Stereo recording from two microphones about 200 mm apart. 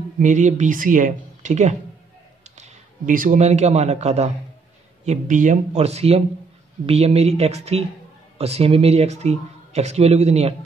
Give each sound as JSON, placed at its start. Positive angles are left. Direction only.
{"t": 0.2, "sound": "a man's voice", "side_deg": -35}